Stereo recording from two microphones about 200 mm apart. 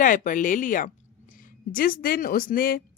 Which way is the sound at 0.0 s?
40° left (ahead or behind).